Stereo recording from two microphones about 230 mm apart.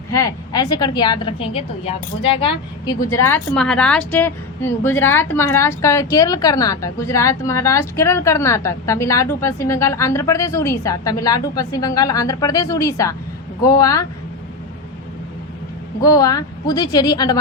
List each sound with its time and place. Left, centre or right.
0.1 s a woman's voice: centre
16.0 s a woman's voice: centre